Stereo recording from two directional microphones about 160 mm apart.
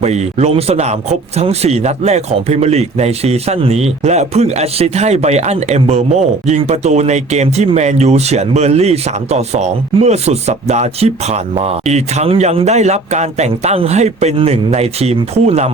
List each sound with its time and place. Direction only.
0.0 s speech: 45° right (ahead or behind)